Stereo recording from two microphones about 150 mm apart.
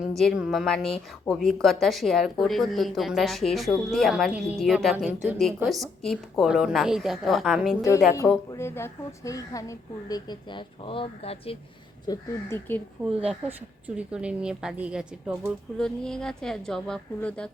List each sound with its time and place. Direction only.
0.2 s a woman's voice: centre (ahead or behind)
7.8 s a woman's voice: 20° left (ahead or behind); by 11.5 s 40° left (ahead or behind)
12.0 s speech: 20° left (ahead or behind)
13.8 s speech: 5° right (ahead or behind)
15.8 s a woman's voice: 5° left (ahead or behind)